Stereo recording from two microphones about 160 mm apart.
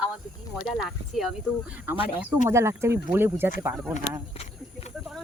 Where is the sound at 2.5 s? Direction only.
15° right (ahead or behind).